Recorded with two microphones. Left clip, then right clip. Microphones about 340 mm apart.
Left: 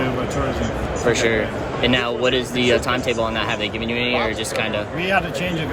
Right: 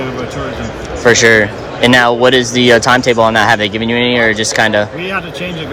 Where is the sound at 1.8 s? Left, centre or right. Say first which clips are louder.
Right 11 dB; centre.